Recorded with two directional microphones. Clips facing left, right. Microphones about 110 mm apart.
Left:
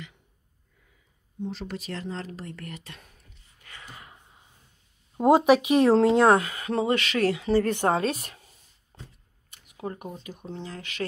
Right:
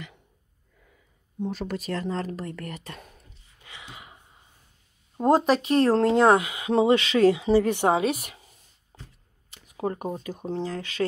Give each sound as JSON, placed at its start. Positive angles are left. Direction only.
{"t": 1.4, "sound": "speech", "side_deg": -50}
{"t": 3.6, "sound": "a sound", "side_deg": -15}
{"t": 5.1, "sound": "speech", "side_deg": 5}
{"t": 6.7, "sound": "speech", "side_deg": -25}
{"t": 9.9, "sound": "speech", "side_deg": -40}